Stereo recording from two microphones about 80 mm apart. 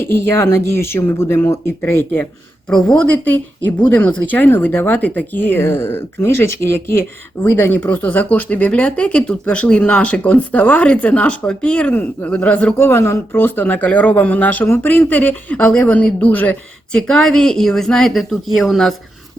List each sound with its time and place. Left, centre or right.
0.0 s speech: left
2.6 s speech: centre
12.8 s speech: left
17.0 s a woman's voice: centre